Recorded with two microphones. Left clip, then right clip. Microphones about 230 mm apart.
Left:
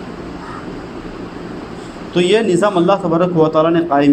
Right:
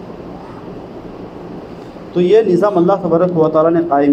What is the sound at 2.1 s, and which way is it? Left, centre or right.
A man's voice, left.